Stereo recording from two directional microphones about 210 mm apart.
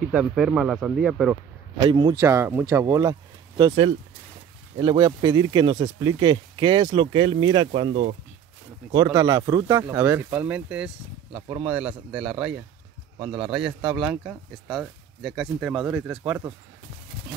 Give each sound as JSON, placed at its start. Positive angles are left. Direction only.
{"t": 0.0, "sound": "speech", "side_deg": -5}
{"t": 1.8, "sound": "speech", "side_deg": -20}